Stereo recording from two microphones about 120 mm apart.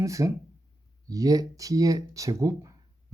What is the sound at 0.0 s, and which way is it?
Speech, 25° right (ahead or behind).